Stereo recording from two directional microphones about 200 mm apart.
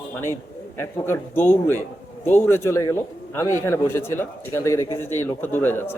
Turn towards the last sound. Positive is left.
turn(degrees=10)  # may be behind; listen again after turning